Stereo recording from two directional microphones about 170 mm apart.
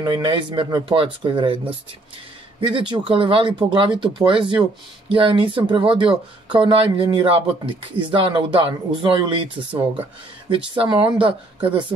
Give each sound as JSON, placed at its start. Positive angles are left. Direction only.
{"t": 0.0, "sound": "speech", "side_deg": -30}
{"t": 2.6, "sound": "speech", "side_deg": -30}